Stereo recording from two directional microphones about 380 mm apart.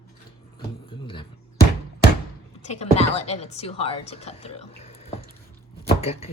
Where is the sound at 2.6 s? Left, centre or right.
Centre.